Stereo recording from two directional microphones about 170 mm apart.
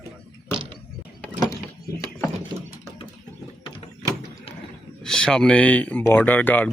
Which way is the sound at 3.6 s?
30° left (ahead or behind).